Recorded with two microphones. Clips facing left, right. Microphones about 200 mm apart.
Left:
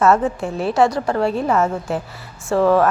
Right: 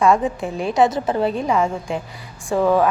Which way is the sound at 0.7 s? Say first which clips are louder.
Even; 20° right (ahead or behind).